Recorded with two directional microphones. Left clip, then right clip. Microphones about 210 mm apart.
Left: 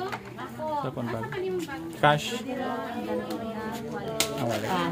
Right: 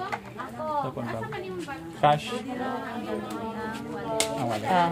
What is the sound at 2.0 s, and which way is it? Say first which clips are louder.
Speech: even; 10° left (ahead or behind).